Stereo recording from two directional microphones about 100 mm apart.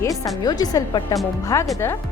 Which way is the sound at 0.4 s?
40° left (ahead or behind).